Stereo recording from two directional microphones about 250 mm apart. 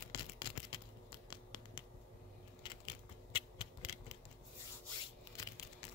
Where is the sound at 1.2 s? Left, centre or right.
Centre.